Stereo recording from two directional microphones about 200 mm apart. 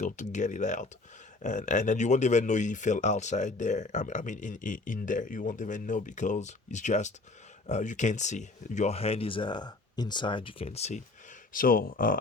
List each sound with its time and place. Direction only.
0.0 s speech: 40° left (ahead or behind)